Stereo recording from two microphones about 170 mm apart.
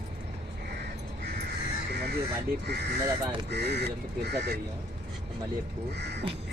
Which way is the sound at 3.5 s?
75° right (ahead or behind).